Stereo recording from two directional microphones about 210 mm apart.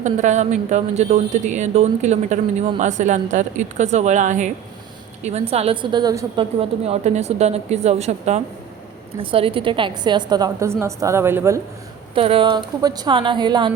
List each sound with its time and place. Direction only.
0.0 s a woman's voice: 35° right (ahead or behind); by 11.6 s 10° right (ahead or behind)
12.1 s a woman's voice: 25° right (ahead or behind)